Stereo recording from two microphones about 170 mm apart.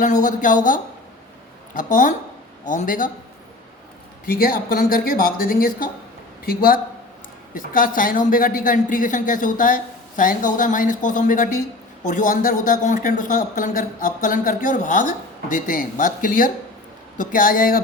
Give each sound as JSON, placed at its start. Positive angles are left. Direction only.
{"t": 0.0, "sound": "speech", "side_deg": 50}
{"t": 4.3, "sound": "speech", "side_deg": 60}